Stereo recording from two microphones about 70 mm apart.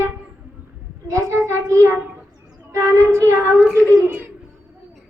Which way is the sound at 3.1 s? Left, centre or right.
Right.